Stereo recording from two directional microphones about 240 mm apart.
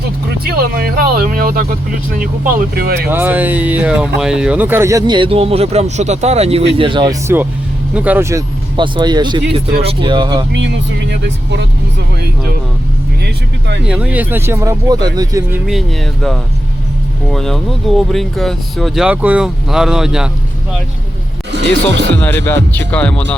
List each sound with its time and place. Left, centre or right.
0.4 s speech: right
3.1 s speech: centre
10.5 s speech: right
13.2 s speech: right
13.8 s speech: centre
17.3 s speech: centre
21.5 s speech: right
22.1 s speech: centre